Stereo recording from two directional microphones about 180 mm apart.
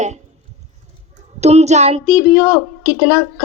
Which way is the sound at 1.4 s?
35° right (ahead or behind).